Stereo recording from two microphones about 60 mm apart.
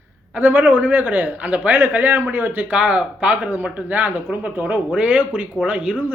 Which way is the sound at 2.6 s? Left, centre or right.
Right.